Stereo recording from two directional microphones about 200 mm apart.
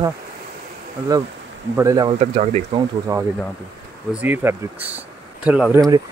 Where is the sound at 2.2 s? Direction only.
35° right (ahead or behind).